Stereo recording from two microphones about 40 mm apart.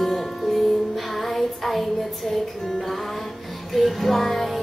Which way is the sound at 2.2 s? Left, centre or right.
Centre.